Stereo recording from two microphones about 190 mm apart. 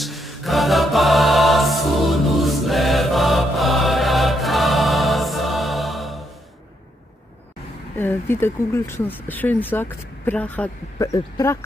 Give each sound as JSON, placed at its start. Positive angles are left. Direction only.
{"t": 0.0, "sound": "choir", "side_deg": 0}
{"t": 7.9, "sound": "speech", "side_deg": 10}